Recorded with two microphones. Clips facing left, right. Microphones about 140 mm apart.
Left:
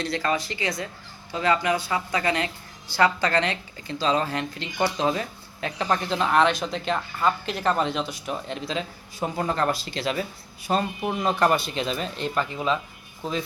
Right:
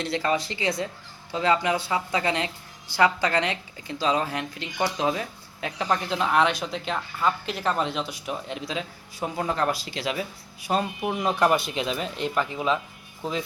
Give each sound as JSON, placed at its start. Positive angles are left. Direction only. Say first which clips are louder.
{"t": 0.0, "sound": "speech", "louder": "even", "side_deg": -20}